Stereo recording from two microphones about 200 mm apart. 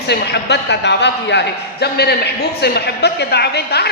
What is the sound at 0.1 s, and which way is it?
A man's voice, 55° left (ahead or behind).